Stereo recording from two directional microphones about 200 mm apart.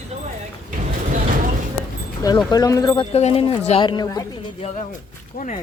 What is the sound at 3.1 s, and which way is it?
Speech, 30° left (ahead or behind).